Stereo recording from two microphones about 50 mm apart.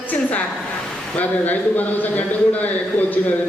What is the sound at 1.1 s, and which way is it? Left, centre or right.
A man's voice, left.